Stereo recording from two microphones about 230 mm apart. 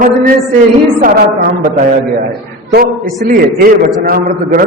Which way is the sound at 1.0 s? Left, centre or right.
Right.